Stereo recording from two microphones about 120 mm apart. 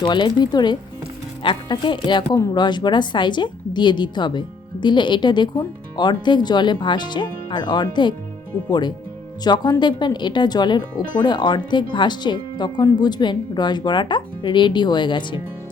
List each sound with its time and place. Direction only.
0.0 s a woman's voice: 40° left (ahead or behind)
9.4 s a woman's voice: 35° left (ahead or behind)